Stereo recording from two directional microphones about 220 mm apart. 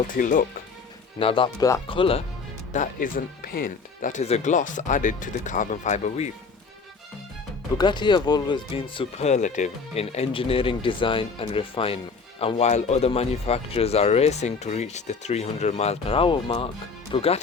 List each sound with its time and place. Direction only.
0.1 s speech: 40° left (ahead or behind)
1.2 s speech: 25° left (ahead or behind)
2.7 s speech: 35° left (ahead or behind)
7.8 s speech: 20° left (ahead or behind)